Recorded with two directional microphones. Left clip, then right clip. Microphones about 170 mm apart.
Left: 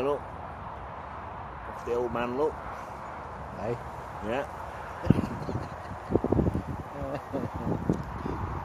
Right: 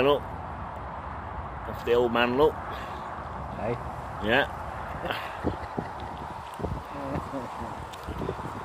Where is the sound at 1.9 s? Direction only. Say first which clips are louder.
Right 7 dB; 15° right (ahead or behind).